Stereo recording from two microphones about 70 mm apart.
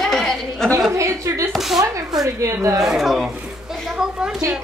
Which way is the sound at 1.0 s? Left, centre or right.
Right.